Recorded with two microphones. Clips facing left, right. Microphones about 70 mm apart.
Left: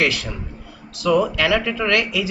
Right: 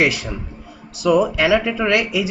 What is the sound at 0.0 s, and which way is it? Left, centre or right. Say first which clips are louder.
Speech: right 2 dB; right.